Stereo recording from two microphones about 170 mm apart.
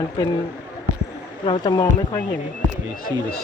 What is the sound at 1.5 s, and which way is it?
Speech, 25° left (ahead or behind).